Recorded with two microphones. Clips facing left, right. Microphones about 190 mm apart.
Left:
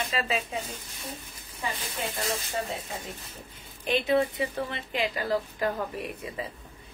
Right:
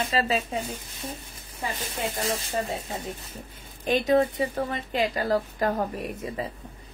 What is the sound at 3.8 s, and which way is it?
A woman's voice, 40° right (ahead or behind).